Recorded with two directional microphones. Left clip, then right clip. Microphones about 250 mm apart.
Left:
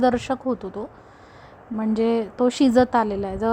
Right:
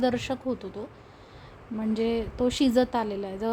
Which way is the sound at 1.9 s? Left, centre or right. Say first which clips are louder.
Left 6 dB; centre.